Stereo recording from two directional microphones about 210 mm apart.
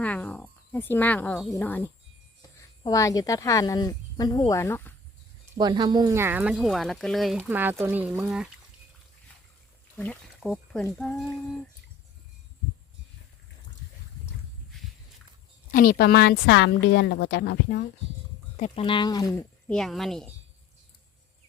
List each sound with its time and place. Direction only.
0.0 s speech: 5° left (ahead or behind)
5.5 s speech: 20° right (ahead or behind); by 8.4 s 5° right (ahead or behind)
10.0 s speech: 5° left (ahead or behind)
15.7 s a woman's voice: 40° left (ahead or behind)
18.5 s speech: 30° left (ahead or behind)
19.7 s a woman's voice: centre (ahead or behind)